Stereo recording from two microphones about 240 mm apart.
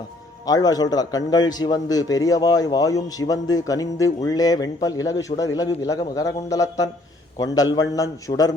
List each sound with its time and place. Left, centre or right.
0.4 s a man's voice: centre